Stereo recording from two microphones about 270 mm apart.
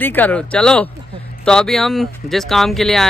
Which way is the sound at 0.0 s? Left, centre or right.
Centre.